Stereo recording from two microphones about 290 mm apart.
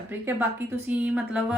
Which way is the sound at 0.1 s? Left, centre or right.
Centre.